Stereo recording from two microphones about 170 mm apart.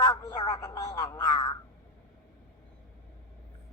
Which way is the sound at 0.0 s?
20° left (ahead or behind).